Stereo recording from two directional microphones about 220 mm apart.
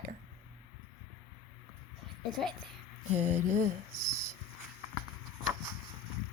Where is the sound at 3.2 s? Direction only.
10° right (ahead or behind).